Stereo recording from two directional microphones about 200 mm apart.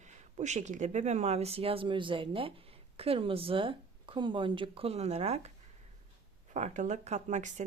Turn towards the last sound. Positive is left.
turn(degrees=-35)  # may be behind; listen again after turning